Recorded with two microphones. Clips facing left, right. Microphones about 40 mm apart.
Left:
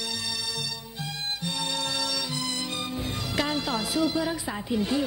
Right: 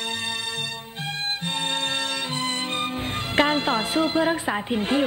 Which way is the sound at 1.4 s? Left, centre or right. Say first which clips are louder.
Right 3 dB; right.